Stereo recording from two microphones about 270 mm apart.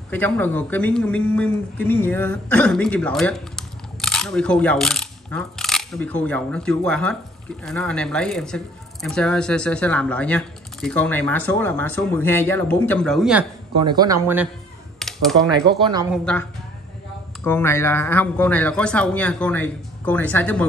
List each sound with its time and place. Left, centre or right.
0.1 s speech: centre
13.8 s speech: centre
15.8 s speech: centre
16.1 s speech: centre